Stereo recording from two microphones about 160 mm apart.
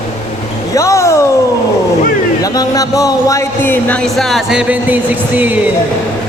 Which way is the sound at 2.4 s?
20° left (ahead or behind).